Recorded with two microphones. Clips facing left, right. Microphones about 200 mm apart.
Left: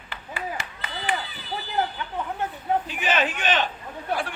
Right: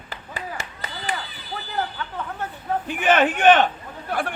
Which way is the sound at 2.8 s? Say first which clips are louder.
Right 6 dB; 55° right (ahead or behind).